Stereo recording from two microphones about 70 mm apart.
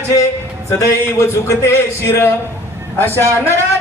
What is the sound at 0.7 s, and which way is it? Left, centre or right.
Music, left.